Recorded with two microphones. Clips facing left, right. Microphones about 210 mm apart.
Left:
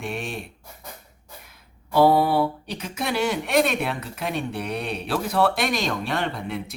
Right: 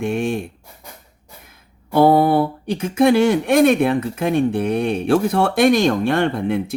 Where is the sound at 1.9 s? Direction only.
50° right (ahead or behind).